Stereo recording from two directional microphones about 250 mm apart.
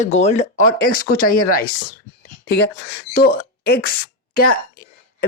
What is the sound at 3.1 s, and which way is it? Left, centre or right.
Speech, left.